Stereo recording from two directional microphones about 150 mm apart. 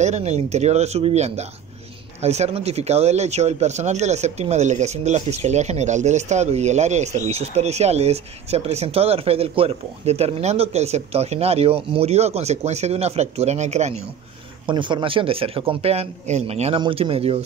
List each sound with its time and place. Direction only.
0.0 s speech: 50° right (ahead or behind)
14.7 s speech: 30° right (ahead or behind)